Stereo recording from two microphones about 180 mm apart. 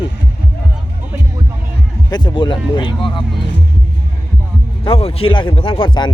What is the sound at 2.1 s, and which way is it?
Speech, 25° left (ahead or behind).